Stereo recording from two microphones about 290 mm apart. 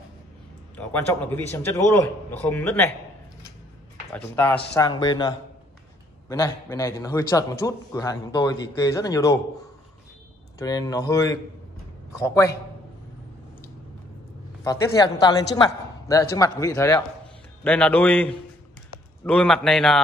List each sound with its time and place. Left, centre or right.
0.7 s a man's voice: centre
4.1 s a man's voice: centre
10.6 s a man's voice: centre
14.6 s a man's voice: centre